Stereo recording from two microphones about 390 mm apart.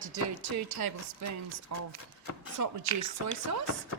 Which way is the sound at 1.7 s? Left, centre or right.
Right.